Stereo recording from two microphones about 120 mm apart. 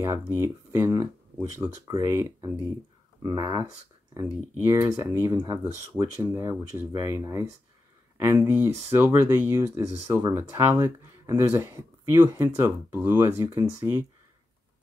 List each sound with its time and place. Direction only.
0.0 s speech: 25° right (ahead or behind)